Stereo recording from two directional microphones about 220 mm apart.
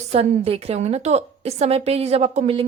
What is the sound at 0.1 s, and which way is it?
A woman's voice, 25° right (ahead or behind).